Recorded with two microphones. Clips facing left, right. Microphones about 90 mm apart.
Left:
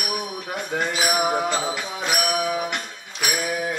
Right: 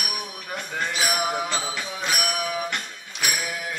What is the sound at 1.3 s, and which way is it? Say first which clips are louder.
Music: left 4 dB; 20° left (ahead or behind).